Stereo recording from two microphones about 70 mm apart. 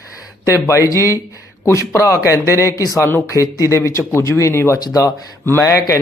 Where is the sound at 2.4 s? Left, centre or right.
Right.